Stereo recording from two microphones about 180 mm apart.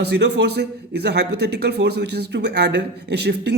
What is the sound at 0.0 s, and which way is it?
A man's voice, 70° right (ahead or behind).